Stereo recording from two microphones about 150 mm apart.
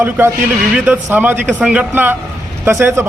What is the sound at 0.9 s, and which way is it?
A man's voice, 15° right (ahead or behind).